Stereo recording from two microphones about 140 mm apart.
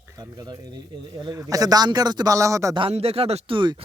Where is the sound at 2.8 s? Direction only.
45° right (ahead or behind).